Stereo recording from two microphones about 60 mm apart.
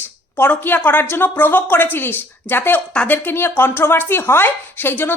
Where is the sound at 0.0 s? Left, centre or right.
Left.